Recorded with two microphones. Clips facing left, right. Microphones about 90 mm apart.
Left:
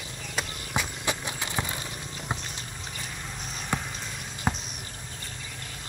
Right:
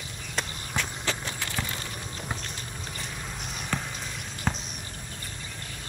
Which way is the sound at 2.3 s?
20° left (ahead or behind).